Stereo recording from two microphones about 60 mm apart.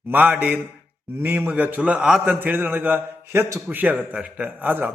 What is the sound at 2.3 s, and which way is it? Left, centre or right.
A man's voice, right.